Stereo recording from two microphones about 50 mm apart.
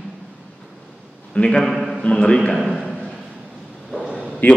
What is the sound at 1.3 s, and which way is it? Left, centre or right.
A man's voice, left.